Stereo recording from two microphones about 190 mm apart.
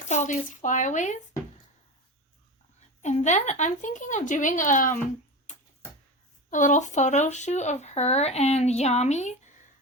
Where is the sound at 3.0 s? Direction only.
40° left (ahead or behind).